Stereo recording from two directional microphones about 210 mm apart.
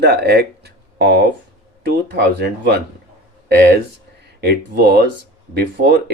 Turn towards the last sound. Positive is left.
turn(degrees=-50)  # may be behind; listen again after turning